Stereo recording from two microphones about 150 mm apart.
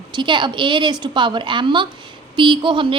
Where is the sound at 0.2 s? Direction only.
30° right (ahead or behind).